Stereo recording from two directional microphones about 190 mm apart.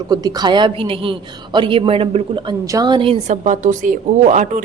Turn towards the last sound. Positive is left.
turn(degrees=-40)  # may be behind; listen again after turning